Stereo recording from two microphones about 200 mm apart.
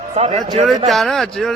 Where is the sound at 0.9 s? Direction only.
Centre (ahead or behind).